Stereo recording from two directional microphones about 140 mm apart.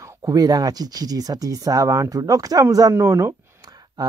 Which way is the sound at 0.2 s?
25° right (ahead or behind).